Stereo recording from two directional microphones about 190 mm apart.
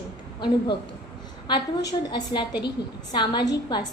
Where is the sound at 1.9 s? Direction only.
20° left (ahead or behind).